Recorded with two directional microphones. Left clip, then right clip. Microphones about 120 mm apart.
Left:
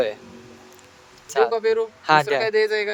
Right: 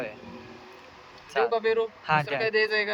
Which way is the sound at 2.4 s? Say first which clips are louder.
Left 4 dB; 40° left (ahead or behind).